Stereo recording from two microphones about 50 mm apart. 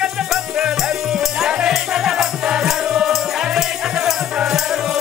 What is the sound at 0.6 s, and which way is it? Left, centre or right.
Music, centre.